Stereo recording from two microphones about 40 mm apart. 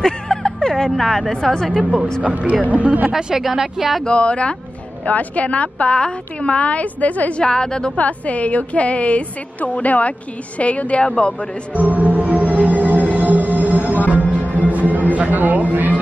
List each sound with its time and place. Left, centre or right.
0.0 s music: centre
0.9 s a woman's voice: centre
1.8 s speech: right
2.2 s speech: right
3.1 s speech: centre
4.0 s a woman's voice: left
7.3 s a woman's voice: centre
8.0 s a woman's voice: left
11.7 s music: right